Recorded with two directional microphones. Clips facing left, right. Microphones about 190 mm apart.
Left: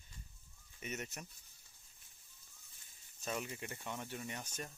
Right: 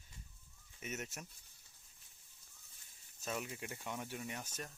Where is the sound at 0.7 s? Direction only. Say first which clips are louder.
Even; 5° right (ahead or behind).